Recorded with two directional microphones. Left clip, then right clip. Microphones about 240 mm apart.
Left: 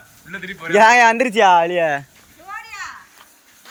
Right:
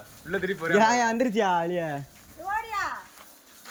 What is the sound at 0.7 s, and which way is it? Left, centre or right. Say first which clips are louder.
Speech: left 11 dB; centre.